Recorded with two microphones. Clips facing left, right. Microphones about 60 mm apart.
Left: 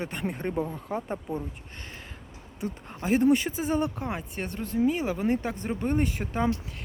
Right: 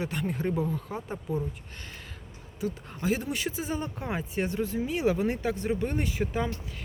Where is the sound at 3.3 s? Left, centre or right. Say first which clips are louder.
Left 6 dB; left.